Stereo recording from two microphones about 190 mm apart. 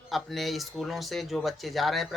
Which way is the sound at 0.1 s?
Centre (ahead or behind).